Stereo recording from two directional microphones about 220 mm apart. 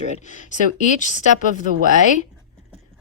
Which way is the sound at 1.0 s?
35° left (ahead or behind).